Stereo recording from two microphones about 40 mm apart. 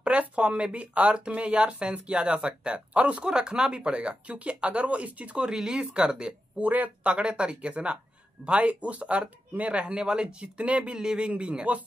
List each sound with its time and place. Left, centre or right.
0.0 s speech: right
3.3 s speech: right
5.5 s speech: centre
6.6 s speech: right
7.0 s speech: right
11.0 s speech: right